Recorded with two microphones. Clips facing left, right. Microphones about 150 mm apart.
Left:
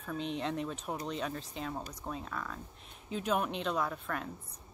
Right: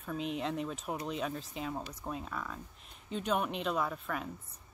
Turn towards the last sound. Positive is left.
turn(degrees=-5)  # may be behind; listen again after turning